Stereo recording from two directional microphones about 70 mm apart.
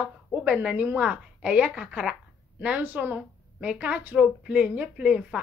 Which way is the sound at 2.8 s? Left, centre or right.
Right.